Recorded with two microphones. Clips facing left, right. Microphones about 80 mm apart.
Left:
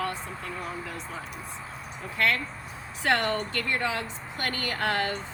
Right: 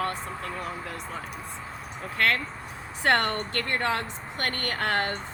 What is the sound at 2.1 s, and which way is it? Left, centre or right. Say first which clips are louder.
A woman's voice: right 1 dB; right.